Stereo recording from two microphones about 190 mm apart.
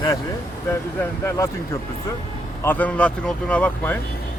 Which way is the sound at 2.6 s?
10° left (ahead or behind).